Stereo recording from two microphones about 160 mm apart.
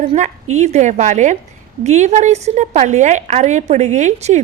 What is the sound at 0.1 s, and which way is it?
A woman's voice, 45° right (ahead or behind).